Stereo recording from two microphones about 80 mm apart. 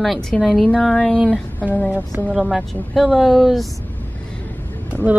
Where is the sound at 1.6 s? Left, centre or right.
Centre.